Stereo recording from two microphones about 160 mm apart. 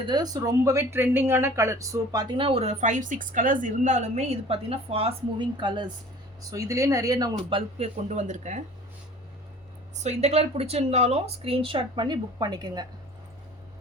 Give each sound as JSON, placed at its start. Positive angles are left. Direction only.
{"t": 0.0, "sound": "speech", "side_deg": -25}
{"t": 7.8, "sound": "speech", "side_deg": -45}
{"t": 10.0, "sound": "speech", "side_deg": -45}